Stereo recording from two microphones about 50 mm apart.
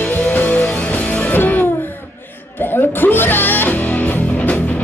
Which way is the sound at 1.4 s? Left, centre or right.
Left.